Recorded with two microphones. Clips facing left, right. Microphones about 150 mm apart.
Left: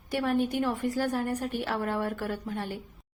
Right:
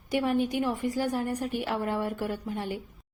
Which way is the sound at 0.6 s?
10° right (ahead or behind).